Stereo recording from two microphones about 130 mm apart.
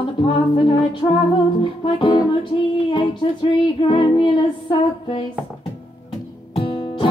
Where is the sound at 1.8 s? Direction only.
40° left (ahead or behind).